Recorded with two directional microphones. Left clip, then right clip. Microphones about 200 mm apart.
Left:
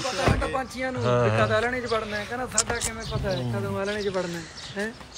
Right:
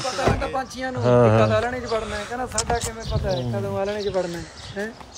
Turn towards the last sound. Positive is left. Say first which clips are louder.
# right 3 dB
turn(degrees=-55)  # may be behind; listen again after turning